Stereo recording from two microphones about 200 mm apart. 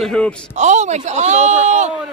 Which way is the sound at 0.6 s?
35° right (ahead or behind).